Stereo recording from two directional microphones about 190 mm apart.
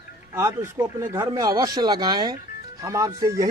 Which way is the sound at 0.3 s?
15° right (ahead or behind).